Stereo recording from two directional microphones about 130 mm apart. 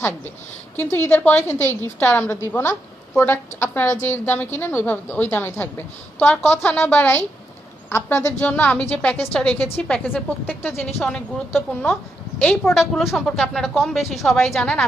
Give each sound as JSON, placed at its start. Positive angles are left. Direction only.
{"t": 0.8, "sound": "a woman's voice", "side_deg": 20}